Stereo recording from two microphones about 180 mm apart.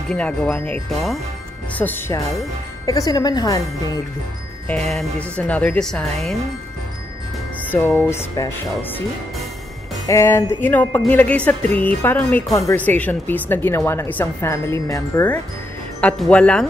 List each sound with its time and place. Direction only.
0.1 s speech: 5° left (ahead or behind)
4.6 s speech: 5° left (ahead or behind)
7.7 s speech: 10° left (ahead or behind)
10.0 s speech: 15° left (ahead or behind)